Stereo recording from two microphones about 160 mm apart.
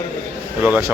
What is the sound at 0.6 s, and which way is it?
Speech, 15° right (ahead or behind).